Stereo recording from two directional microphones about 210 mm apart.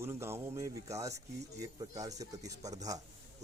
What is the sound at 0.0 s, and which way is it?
Speech, 10° right (ahead or behind).